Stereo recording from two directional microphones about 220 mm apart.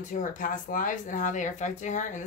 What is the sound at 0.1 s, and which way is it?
Speech, 35° left (ahead or behind).